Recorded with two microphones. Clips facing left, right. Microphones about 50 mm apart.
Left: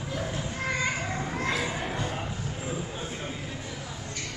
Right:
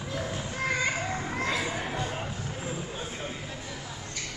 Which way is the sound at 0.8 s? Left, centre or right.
Centre.